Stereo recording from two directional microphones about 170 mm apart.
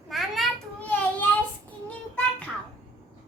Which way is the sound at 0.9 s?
10° left (ahead or behind).